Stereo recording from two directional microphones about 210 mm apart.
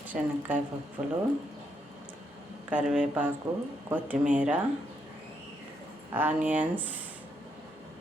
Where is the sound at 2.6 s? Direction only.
5° right (ahead or behind).